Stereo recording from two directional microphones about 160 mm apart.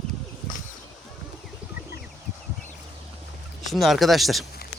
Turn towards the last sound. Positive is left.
turn(degrees=0)  # may be behind; listen again after turning